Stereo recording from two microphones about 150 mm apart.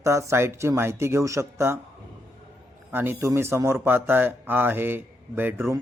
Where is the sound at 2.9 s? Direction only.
15° right (ahead or behind).